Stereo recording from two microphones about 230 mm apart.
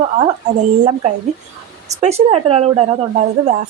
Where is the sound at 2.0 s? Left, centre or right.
Right.